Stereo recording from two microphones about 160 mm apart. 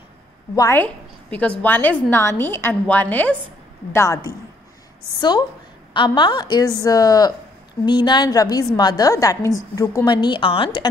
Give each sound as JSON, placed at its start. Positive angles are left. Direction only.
{"t": 0.6, "sound": "a woman's voice", "side_deg": 15}
{"t": 5.9, "sound": "a woman's voice", "side_deg": 30}